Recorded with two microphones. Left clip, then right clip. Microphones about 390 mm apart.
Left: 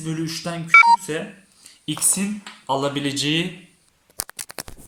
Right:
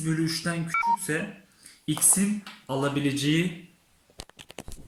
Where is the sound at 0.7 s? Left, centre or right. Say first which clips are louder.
Left 14 dB; left.